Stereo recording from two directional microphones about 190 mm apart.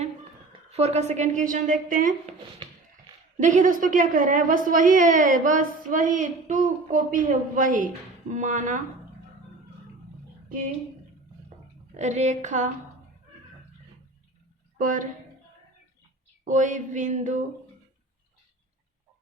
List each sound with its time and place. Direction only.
0.7 s a woman's voice: 35° right (ahead or behind)
3.3 s a woman's voice: 40° right (ahead or behind)
11.9 s a woman's voice: 35° right (ahead or behind)
14.8 s a woman's voice: 45° right (ahead or behind)
16.4 s a woman's voice: 40° right (ahead or behind)